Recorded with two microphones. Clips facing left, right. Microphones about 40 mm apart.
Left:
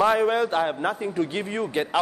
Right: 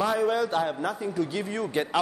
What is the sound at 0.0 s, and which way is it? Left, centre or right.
A man's voice, left.